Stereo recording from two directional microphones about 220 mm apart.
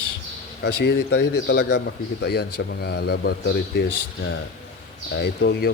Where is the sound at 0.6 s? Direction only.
50° left (ahead or behind).